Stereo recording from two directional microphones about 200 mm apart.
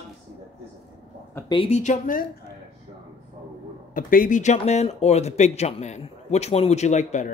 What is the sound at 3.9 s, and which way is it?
Speech, 40° left (ahead or behind).